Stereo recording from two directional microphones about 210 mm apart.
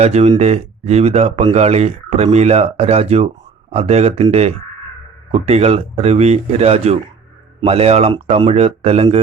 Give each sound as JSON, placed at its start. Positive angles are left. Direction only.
{"t": 0.0, "sound": "speech", "side_deg": -30}